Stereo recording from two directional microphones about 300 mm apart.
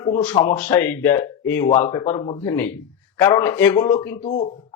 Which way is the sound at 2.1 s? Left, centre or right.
Centre.